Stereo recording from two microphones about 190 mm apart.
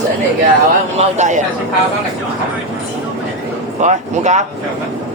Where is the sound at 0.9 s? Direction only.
40° right (ahead or behind).